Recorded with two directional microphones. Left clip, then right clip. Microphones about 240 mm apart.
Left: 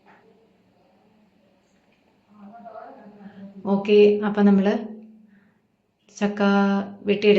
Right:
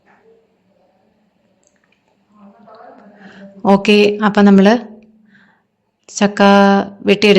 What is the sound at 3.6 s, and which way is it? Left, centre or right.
Speech, right.